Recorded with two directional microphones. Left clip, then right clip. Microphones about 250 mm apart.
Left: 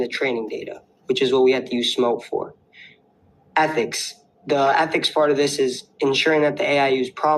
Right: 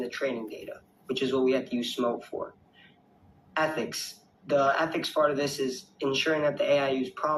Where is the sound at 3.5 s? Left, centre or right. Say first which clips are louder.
Left 9 dB; left.